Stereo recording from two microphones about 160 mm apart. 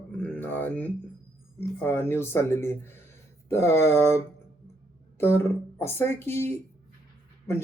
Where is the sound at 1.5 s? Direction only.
15° left (ahead or behind).